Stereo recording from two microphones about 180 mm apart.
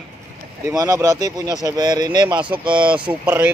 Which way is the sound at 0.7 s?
20° right (ahead or behind).